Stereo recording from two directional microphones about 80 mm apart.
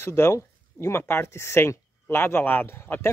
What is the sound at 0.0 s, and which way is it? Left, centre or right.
Speech, left.